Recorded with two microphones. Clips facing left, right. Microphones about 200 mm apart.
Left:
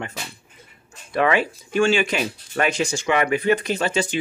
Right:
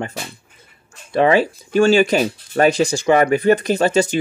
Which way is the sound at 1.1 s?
30° right (ahead or behind).